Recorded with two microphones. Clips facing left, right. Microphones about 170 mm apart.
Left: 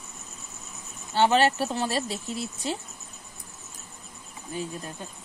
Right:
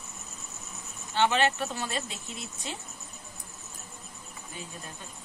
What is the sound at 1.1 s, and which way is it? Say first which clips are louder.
Speech: left 4 dB; 35° left (ahead or behind).